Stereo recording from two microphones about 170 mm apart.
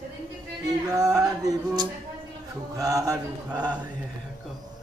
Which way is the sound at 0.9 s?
20° right (ahead or behind).